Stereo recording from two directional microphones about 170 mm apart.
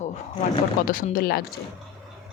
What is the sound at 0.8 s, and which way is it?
Speech, 55° left (ahead or behind).